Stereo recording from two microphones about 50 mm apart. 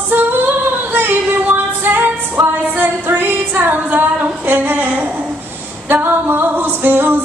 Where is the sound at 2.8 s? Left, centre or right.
Right.